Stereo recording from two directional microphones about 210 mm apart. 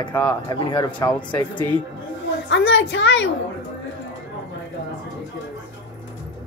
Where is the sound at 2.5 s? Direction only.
60° left (ahead or behind).